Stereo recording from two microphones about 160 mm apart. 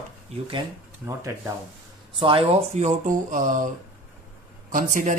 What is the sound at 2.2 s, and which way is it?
Speech, 35° right (ahead or behind).